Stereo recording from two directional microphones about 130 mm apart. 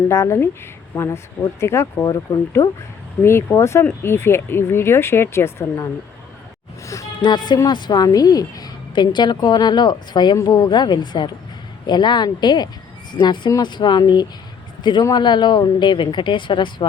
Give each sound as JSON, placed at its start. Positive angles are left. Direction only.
{"t": 0.1, "sound": "a woman's voice", "side_deg": 20}